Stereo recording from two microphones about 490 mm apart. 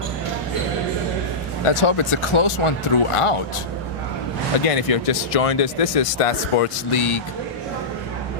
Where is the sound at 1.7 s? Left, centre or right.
Left.